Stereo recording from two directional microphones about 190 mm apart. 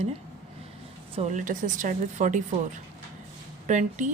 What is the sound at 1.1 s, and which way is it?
Speech, 40° right (ahead or behind).